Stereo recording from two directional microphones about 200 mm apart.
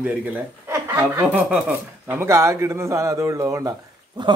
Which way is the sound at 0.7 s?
15° right (ahead or behind).